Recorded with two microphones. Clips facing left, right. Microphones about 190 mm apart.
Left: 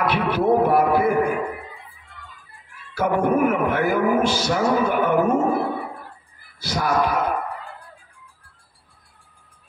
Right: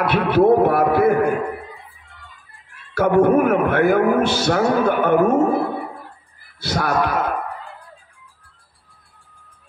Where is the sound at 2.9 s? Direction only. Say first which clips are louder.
Right 5 dB; 65° right (ahead or behind).